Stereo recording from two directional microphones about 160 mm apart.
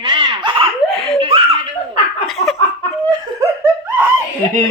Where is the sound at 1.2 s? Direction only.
35° right (ahead or behind).